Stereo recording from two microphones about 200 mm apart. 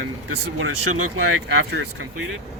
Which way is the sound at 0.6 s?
90° right.